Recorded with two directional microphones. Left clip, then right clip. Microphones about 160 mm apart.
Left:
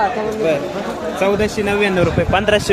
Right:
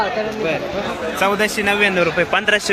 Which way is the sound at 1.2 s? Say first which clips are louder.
Left 1 dB; centre (ahead or behind).